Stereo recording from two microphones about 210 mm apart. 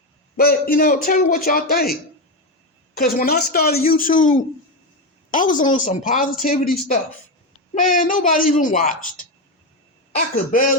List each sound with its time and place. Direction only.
0.3 s a man's voice: 45° left (ahead or behind)